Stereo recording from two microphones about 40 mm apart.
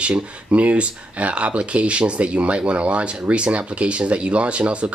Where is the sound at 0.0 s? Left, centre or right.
Right.